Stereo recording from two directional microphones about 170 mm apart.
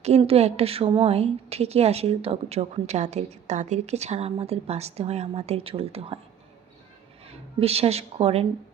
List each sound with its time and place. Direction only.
0.0 s a woman's voice: 35° right (ahead or behind)
7.3 s speech: 35° right (ahead or behind)